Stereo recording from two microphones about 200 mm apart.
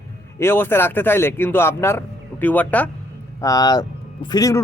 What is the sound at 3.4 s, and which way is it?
Speech, 20° left (ahead or behind).